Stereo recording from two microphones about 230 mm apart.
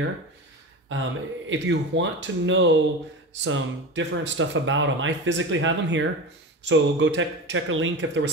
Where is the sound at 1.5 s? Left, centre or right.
Right.